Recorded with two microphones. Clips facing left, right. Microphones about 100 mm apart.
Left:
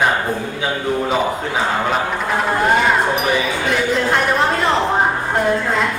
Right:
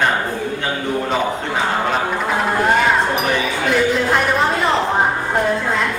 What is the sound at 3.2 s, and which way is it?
Speech, centre (ahead or behind).